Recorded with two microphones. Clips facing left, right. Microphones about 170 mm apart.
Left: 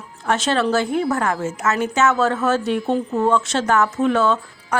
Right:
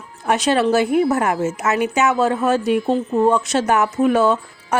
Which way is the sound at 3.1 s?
15° right (ahead or behind).